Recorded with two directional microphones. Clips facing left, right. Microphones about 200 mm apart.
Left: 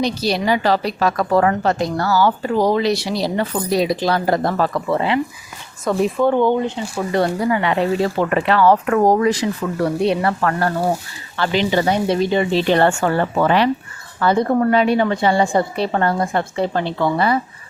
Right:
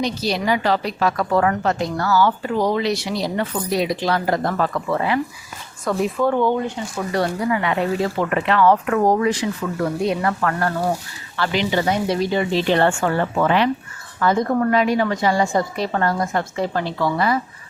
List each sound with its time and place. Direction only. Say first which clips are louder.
0.0 s a woman's voice: left 3 dB; 35° left (ahead or behind)
12.7 s a woman's voice: left 2 dB; 40° left (ahead or behind)